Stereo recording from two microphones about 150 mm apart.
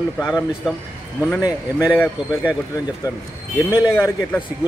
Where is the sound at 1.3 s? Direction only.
20° left (ahead or behind).